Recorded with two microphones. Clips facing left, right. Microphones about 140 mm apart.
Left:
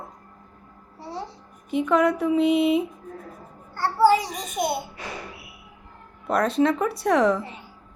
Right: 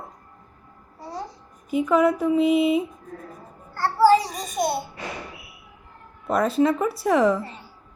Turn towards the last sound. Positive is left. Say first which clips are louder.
# right 1 dB
turn(degrees=0)  # may be behind; listen again after turning